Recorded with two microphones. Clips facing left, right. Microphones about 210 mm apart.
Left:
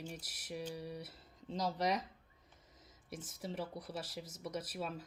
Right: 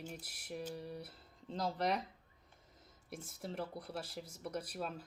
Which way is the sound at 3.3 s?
Centre (ahead or behind).